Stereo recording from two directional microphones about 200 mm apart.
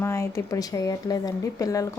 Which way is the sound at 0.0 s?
15° left (ahead or behind).